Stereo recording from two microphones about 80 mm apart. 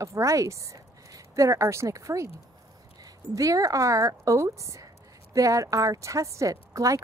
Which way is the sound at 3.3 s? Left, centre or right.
Right.